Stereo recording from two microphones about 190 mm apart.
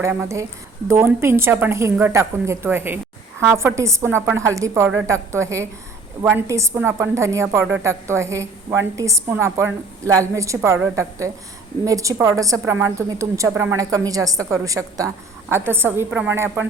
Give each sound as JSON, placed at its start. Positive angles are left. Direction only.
{"t": 0.0, "sound": "a woman's voice", "side_deg": -15}
{"t": 11.9, "sound": "a woman's voice", "side_deg": -15}